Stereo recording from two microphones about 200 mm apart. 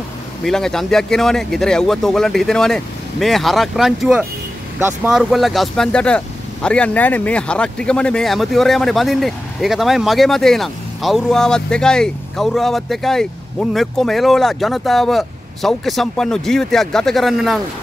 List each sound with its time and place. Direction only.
0.4 s speech: centre (ahead or behind)